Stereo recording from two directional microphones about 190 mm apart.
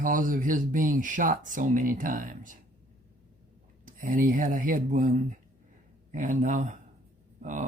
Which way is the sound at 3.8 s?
45° right (ahead or behind).